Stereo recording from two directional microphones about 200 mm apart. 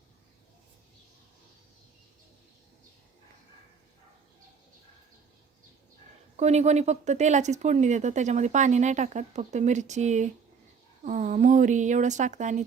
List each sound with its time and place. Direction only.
6.3 s speech: 35° right (ahead or behind)